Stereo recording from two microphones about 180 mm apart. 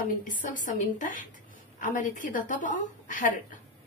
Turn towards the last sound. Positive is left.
turn(degrees=45)  # may be behind; listen again after turning